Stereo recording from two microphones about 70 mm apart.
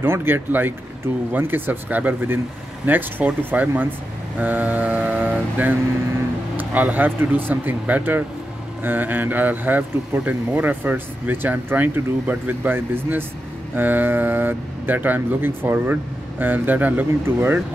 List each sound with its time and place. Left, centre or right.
0.0 s speech: right